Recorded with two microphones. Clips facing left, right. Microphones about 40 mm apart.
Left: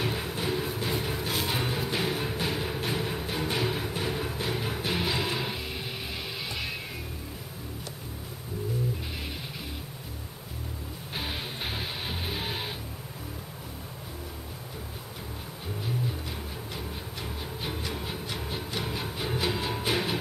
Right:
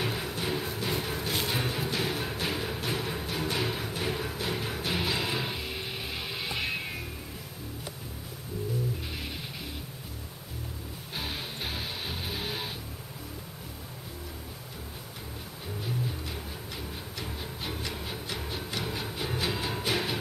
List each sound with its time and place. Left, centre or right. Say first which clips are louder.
0.0 s music: left 1 dB; centre
6.4 s music: right 5 dB; centre
11.1 s music: left 2 dB; centre
17.2 s music: left 1 dB; centre